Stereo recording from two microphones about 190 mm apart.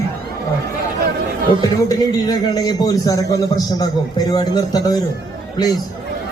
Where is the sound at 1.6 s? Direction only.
20° left (ahead or behind).